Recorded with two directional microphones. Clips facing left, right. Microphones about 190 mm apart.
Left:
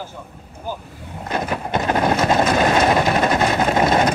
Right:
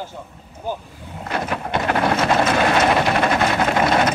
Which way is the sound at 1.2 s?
20° left (ahead or behind).